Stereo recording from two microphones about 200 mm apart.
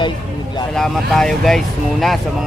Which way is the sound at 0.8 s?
Centre (ahead or behind).